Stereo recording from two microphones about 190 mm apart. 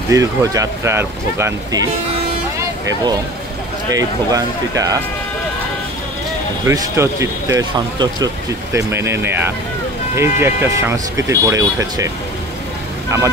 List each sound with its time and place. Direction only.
0.1 s speech: 15° right (ahead or behind)
3.9 s speech: 20° right (ahead or behind)
6.6 s speech: 15° right (ahead or behind)